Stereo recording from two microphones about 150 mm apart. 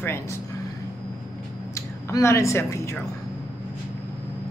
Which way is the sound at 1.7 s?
20° left (ahead or behind).